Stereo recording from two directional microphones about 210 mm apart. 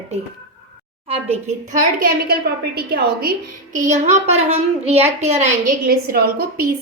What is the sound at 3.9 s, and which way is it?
A woman's voice, 30° right (ahead or behind).